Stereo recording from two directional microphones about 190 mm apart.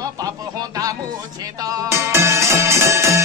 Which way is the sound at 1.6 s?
20° right (ahead or behind).